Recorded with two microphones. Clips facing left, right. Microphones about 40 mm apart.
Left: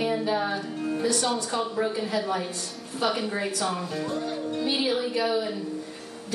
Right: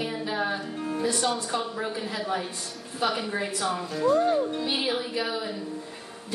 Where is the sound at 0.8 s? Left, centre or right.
Centre.